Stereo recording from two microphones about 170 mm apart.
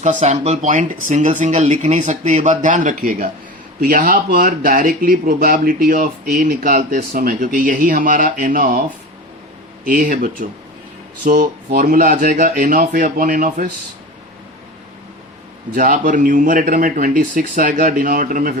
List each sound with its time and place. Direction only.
0.0 s speech: 45° right (ahead or behind)
9.8 s speech: 55° right (ahead or behind)
15.7 s speech: 50° right (ahead or behind)